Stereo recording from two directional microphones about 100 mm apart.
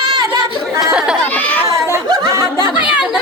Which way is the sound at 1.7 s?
30° right (ahead or behind).